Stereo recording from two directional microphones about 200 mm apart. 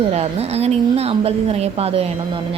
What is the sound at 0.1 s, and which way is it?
A woman's voice, 30° right (ahead or behind).